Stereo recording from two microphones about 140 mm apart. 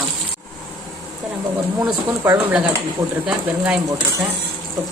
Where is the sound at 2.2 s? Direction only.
10° right (ahead or behind).